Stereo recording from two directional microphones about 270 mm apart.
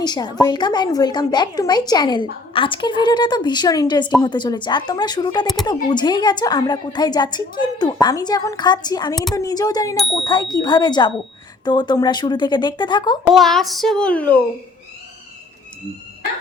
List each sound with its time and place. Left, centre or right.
0.0 s a woman's voice: centre
13.2 s a child's voice: centre